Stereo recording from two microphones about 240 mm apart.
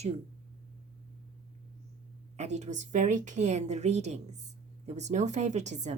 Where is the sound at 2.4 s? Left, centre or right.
Right.